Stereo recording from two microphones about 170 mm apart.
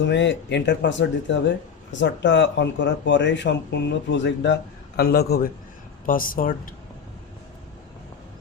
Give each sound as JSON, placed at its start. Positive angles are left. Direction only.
{"t": 0.0, "sound": "speech", "side_deg": 90}
{"t": 4.9, "sound": "a man's voice", "side_deg": 70}
{"t": 6.1, "sound": "speech", "side_deg": 55}